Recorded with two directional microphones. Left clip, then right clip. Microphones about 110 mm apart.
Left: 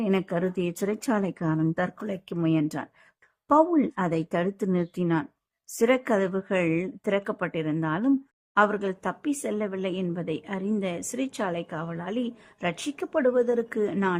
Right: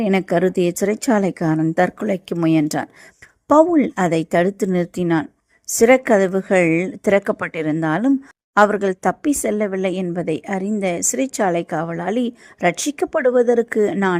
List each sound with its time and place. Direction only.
0.0 s a woman's voice: 35° right (ahead or behind)